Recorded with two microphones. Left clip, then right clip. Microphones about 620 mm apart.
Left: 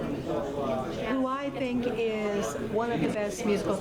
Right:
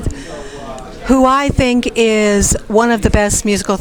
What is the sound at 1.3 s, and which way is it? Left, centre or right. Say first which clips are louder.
Speech: right 18 dB; right.